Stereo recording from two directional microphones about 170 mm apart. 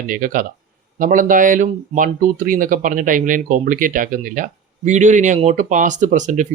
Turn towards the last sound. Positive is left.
turn(degrees=-45)  # may be behind; listen again after turning